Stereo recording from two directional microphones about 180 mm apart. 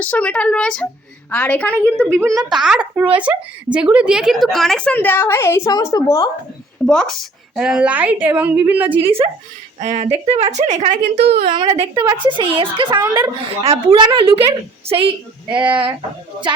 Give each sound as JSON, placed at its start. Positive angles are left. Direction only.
{"t": 0.0, "sound": "speech", "side_deg": 5}
{"t": 2.0, "sound": "a woman's voice", "side_deg": -15}
{"t": 2.6, "sound": "a woman's voice", "side_deg": -5}
{"t": 6.8, "sound": "a woman's voice", "side_deg": 5}
{"t": 9.0, "sound": "a woman's voice", "side_deg": -30}
{"t": 11.1, "sound": "a woman's voice", "side_deg": -65}
{"t": 11.4, "sound": "a woman's voice", "side_deg": -30}